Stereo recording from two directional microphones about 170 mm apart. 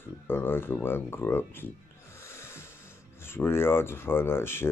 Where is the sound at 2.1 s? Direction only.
15° left (ahead or behind).